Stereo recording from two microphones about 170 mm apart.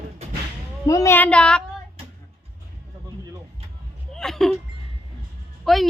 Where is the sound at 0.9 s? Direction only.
15° left (ahead or behind).